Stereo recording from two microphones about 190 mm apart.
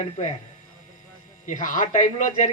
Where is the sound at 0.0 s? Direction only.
40° left (ahead or behind).